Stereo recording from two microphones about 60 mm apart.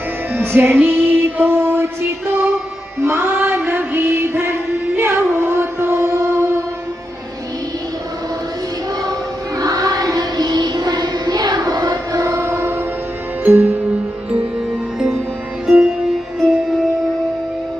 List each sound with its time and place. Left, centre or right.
0.3 s music: right
9.6 s music: right
11.6 s music: right
12.4 s train: right
13.4 s music: right
15.6 s music: centre